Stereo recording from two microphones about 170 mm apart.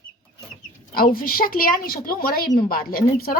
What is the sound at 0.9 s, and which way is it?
A woman's voice, 60° left (ahead or behind).